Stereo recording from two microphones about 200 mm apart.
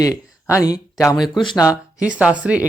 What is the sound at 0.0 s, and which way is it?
Speech, 15° left (ahead or behind).